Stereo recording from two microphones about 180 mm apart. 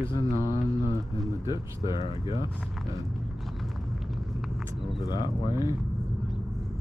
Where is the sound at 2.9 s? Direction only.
Centre (ahead or behind).